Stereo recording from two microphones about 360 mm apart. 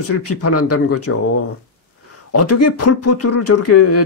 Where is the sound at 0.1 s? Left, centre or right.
Left.